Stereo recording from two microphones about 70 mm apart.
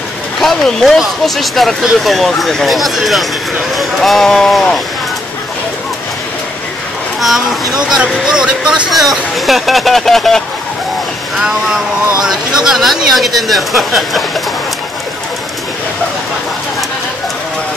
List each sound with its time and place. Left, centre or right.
0.4 s speech: centre
7.2 s speech: centre
11.7 s speech: centre